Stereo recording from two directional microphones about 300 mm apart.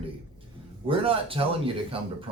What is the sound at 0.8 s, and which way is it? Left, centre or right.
Speech, centre.